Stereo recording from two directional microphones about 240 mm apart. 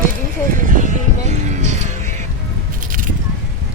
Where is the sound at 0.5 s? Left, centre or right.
Right.